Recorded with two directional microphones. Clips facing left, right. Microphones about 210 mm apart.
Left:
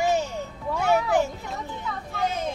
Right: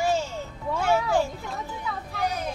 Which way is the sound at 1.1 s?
20° left (ahead or behind).